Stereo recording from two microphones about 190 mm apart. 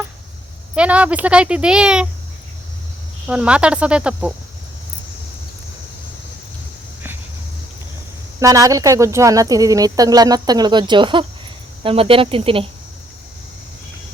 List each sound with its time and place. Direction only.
0.8 s speech: 5° right (ahead or behind)
3.2 s speech: 5° right (ahead or behind)
8.4 s speech: 15° right (ahead or behind)